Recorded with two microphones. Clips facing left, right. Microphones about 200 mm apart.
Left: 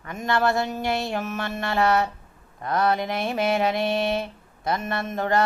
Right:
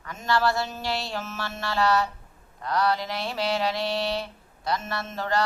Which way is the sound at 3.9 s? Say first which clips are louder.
Left 4 dB; 20° left (ahead or behind).